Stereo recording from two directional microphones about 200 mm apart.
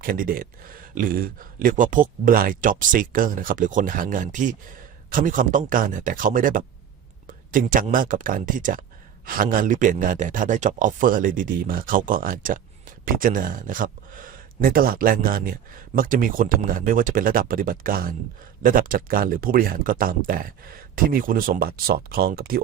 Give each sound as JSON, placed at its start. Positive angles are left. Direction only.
{"t": 0.0, "sound": "speech", "side_deg": -45}